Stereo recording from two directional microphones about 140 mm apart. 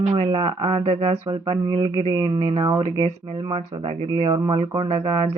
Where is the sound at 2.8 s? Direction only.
40° right (ahead or behind).